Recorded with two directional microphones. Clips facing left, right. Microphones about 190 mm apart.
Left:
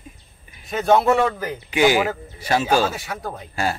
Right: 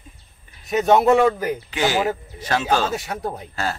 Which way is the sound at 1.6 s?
15° left (ahead or behind).